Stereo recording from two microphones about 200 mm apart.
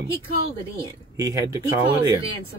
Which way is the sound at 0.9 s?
15° right (ahead or behind).